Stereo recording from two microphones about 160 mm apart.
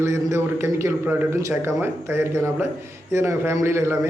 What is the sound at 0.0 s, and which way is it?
A man's voice, 20° right (ahead or behind).